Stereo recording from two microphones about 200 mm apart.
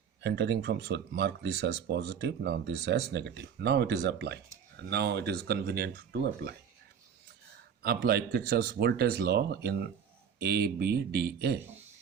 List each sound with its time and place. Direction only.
0.2 s speech: 55° right (ahead or behind)
8.0 s speech: 50° right (ahead or behind)